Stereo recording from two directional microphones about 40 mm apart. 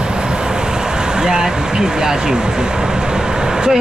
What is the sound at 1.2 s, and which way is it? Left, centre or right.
Speech, centre.